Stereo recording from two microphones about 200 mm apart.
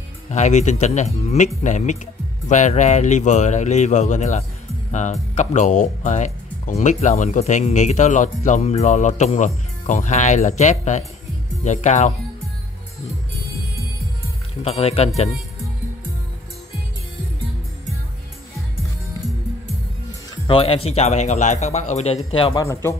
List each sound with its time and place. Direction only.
0.3 s speech: 35° left (ahead or behind)
14.6 s speech: 30° left (ahead or behind)
20.4 s speech: 25° left (ahead or behind)
22.5 s speech: 15° left (ahead or behind)